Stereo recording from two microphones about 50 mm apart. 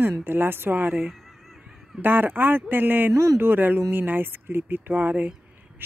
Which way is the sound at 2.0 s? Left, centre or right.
Right.